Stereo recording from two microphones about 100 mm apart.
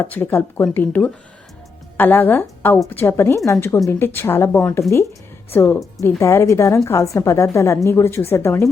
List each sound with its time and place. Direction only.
0.0 s a woman's voice: 20° left (ahead or behind)